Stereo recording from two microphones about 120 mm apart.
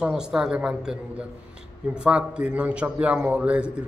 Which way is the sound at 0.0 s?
5° right (ahead or behind).